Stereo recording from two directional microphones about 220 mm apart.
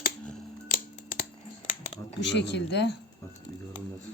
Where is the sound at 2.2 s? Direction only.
50° left (ahead or behind).